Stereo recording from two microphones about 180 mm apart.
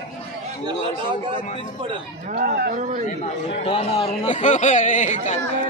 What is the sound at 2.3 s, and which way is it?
Speech, 55° right (ahead or behind).